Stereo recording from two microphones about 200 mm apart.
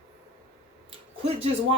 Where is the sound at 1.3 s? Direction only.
30° right (ahead or behind).